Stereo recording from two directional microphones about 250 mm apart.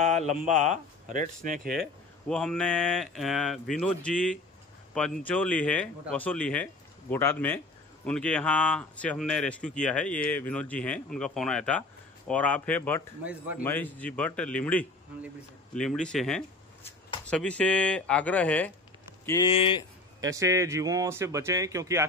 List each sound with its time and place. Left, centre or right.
0.0 s a sound: right
0.4 s speech: right
1.8 s speech: centre
13.2 s speech: centre
13.6 s speech: centre
20.2 s speech: centre